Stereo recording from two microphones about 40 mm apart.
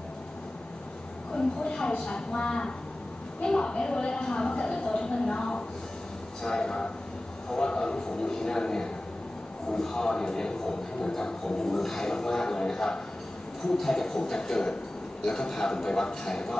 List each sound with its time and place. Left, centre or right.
1.3 s a woman's voice: left